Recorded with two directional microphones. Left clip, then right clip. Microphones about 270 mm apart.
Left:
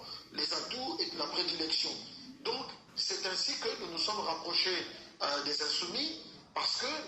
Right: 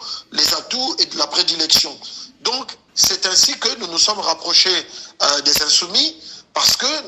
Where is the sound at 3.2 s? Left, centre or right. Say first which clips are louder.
Right 18 dB; right.